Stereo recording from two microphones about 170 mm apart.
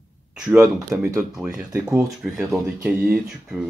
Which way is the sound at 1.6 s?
20° right (ahead or behind).